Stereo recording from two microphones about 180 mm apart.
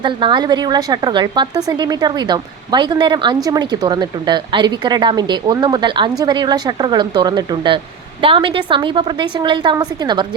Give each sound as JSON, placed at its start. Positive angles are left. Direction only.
{"t": 0.0, "sound": "speech", "side_deg": -25}